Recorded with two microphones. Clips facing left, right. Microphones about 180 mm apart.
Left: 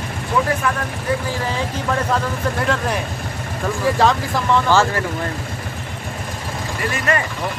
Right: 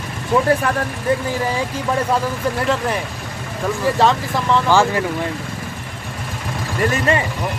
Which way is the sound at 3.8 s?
Centre (ahead or behind).